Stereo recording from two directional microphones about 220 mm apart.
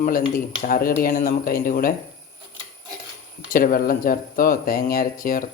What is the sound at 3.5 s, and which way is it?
Speech, 40° left (ahead or behind).